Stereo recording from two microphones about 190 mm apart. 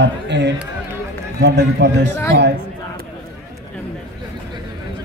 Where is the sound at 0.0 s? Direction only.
65° right (ahead or behind).